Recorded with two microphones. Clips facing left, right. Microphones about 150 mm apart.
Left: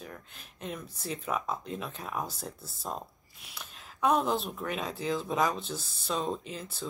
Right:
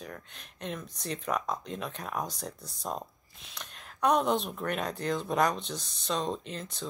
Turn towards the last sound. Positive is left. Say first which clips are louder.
# right 1 dB
turn(degrees=5)  # may be behind; listen again after turning